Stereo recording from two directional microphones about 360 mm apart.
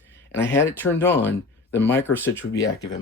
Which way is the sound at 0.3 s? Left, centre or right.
Centre.